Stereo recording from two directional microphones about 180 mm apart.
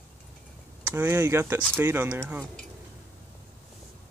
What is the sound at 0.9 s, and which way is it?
Speech, 15° right (ahead or behind).